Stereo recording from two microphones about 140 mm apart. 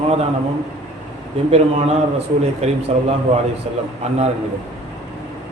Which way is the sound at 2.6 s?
50° right (ahead or behind).